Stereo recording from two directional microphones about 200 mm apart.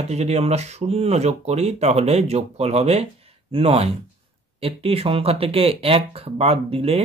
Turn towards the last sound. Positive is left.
turn(degrees=-30)  # may be behind; listen again after turning